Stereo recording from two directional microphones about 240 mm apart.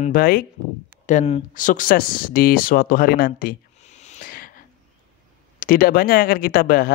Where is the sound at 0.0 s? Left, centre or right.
Left.